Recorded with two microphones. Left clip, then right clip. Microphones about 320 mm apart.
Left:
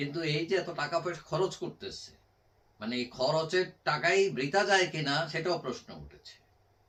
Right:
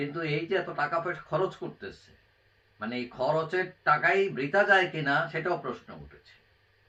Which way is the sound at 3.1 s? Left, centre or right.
Centre.